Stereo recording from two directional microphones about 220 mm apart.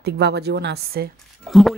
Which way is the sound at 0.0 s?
50° right (ahead or behind).